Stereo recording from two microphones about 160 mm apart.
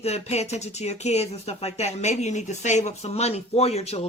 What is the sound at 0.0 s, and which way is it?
Speech, 40° left (ahead or behind).